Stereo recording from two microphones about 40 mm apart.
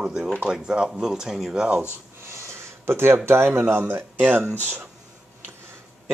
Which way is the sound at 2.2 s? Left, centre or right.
Right.